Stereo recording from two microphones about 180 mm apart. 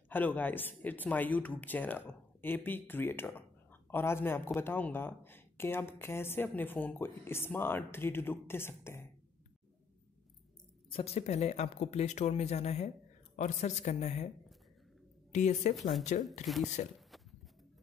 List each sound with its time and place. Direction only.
0.1 s speech: 10° left (ahead or behind)
10.9 s speech: 35° left (ahead or behind)
15.3 s speech: 40° left (ahead or behind)
16.4 s speech: centre (ahead or behind)
17.1 s a sound: centre (ahead or behind)